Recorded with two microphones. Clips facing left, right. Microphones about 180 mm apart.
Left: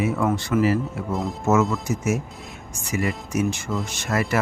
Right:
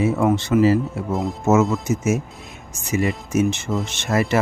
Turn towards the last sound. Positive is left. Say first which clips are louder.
# right 4 dB
turn(degrees=-25)  # may be behind; listen again after turning